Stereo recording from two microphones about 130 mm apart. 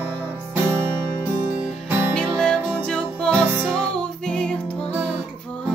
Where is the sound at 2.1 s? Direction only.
5° left (ahead or behind).